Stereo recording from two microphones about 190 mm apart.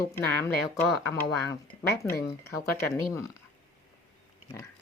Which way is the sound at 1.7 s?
40° left (ahead or behind).